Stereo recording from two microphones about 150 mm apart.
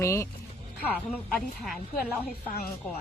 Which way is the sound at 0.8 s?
5° left (ahead or behind).